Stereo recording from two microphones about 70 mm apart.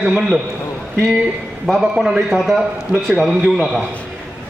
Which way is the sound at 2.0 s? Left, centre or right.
Centre.